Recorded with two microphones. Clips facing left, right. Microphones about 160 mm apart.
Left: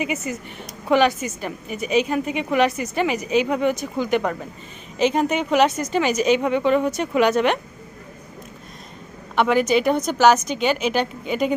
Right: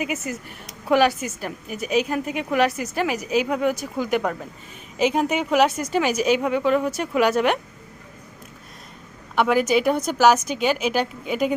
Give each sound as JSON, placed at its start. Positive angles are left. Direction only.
{"t": 0.0, "sound": "a woman's voice", "side_deg": 0}
{"t": 9.3, "sound": "a woman's voice", "side_deg": -5}